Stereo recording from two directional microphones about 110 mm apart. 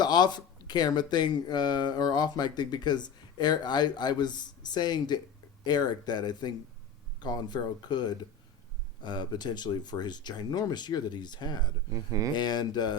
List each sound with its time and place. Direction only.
0.0 s speech: 40° left (ahead or behind)